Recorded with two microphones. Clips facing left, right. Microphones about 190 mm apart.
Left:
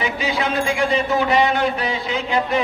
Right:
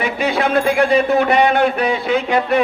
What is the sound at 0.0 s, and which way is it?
A man's voice, 60° right (ahead or behind).